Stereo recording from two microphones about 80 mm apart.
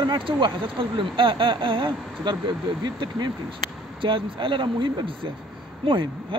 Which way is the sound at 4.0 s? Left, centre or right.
Right.